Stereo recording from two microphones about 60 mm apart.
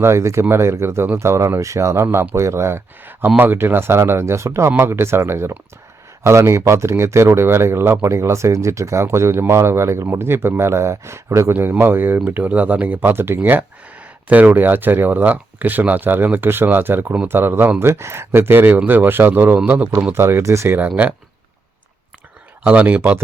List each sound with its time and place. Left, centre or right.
0.0 s speech: right
1.2 s speech: right
11.8 s speech: right
12.2 s speech: right
20.1 s speech: right
20.4 s speech: right
20.7 s speech: right
22.6 s speech: right